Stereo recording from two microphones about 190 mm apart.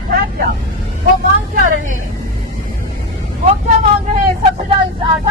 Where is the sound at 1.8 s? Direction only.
45° right (ahead or behind).